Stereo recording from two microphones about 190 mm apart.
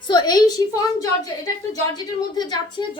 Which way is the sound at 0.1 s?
20° left (ahead or behind).